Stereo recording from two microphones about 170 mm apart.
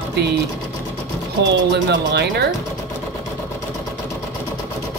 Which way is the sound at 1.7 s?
80° right.